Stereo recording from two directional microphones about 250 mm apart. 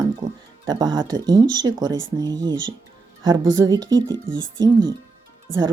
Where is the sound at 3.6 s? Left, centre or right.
Centre.